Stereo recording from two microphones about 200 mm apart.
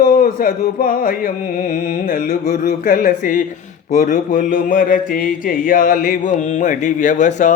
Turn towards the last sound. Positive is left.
turn(degrees=35)  # may be behind; listen again after turning